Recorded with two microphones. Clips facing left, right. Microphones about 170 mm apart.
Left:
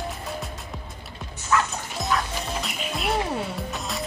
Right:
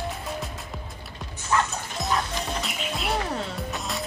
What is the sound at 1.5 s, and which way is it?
Music, 30° right (ahead or behind).